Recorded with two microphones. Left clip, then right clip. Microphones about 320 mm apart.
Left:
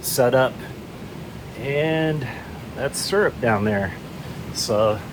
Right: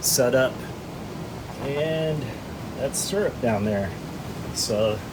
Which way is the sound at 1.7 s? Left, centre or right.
Left.